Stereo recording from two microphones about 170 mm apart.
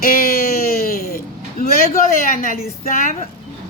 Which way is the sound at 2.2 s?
55° left (ahead or behind).